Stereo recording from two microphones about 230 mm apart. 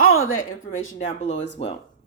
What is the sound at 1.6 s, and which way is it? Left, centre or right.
Speech, left.